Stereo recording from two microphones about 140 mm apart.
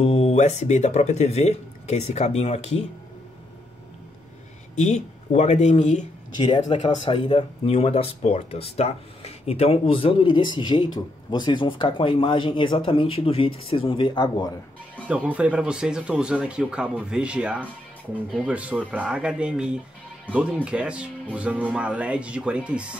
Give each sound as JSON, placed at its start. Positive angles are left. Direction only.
{"t": 0.0, "sound": "speech", "side_deg": 50}
{"t": 4.7, "sound": "speech", "side_deg": 55}
{"t": 6.3, "sound": "speech", "side_deg": 35}
{"t": 15.0, "sound": "speech", "side_deg": -10}